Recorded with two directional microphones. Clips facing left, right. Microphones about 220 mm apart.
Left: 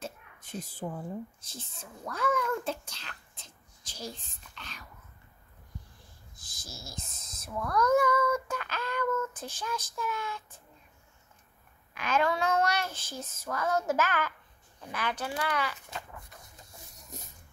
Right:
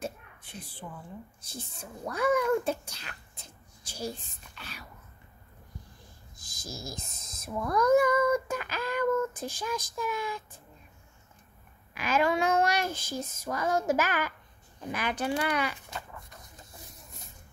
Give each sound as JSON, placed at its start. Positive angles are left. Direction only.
{"t": 0.4, "sound": "a woman's voice", "side_deg": 40}
{"t": 1.4, "sound": "a child's voice", "side_deg": -10}
{"t": 4.2, "sound": "child singing", "side_deg": -10}
{"t": 6.5, "sound": "a sound", "side_deg": -90}
{"t": 7.4, "sound": "child singing", "side_deg": -10}
{"t": 11.9, "sound": "child singing", "side_deg": -10}